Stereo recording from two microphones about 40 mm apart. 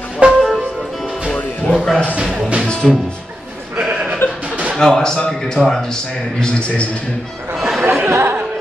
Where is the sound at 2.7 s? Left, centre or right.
Left.